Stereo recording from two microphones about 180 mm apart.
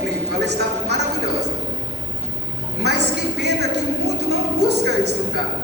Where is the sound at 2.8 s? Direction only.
70° right (ahead or behind).